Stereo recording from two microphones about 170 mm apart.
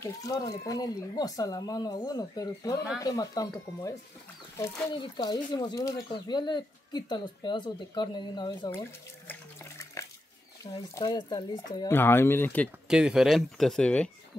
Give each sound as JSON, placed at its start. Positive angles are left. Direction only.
{"t": 0.0, "sound": "speech", "side_deg": 20}
{"t": 5.0, "sound": "speech", "side_deg": 25}
{"t": 9.3, "sound": "water", "side_deg": 15}
{"t": 10.6, "sound": "speech", "side_deg": 25}
{"t": 11.9, "sound": "speech", "side_deg": 15}
{"t": 12.8, "sound": "speech", "side_deg": -5}